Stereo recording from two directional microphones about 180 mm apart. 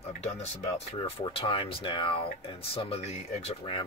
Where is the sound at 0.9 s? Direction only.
30° left (ahead or behind).